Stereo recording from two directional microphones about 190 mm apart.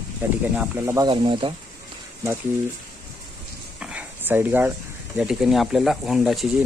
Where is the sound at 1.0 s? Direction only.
25° right (ahead or behind).